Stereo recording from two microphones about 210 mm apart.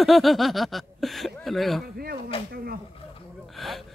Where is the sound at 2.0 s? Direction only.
45° right (ahead or behind).